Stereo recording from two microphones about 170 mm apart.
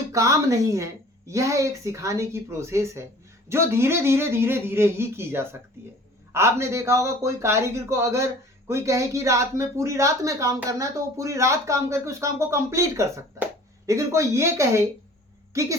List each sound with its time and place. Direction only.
0.1 s speech: 20° right (ahead or behind)